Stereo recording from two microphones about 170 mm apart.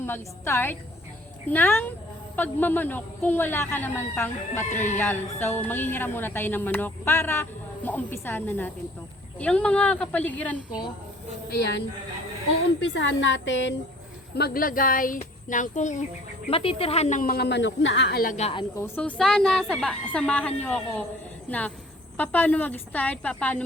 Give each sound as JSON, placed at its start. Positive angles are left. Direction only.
{"t": 0.0, "sound": "speech", "side_deg": 15}
{"t": 4.7, "sound": "speech", "side_deg": 45}
{"t": 4.9, "sound": "speech", "side_deg": 15}
{"t": 12.8, "sound": "a woman's voice", "side_deg": 90}
{"t": 14.3, "sound": "speech", "side_deg": 65}
{"t": 16.5, "sound": "speech", "side_deg": 35}
{"t": 18.3, "sound": "a woman's voice", "side_deg": 40}
{"t": 18.8, "sound": "a woman's voice", "side_deg": 10}
{"t": 22.2, "sound": "speech", "side_deg": 10}